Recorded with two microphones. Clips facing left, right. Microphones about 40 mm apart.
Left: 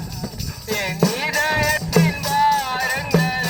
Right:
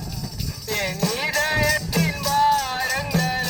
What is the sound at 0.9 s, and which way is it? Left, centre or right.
Music, left.